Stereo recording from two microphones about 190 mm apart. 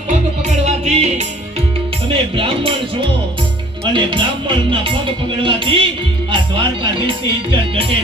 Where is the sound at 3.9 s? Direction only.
25° right (ahead or behind).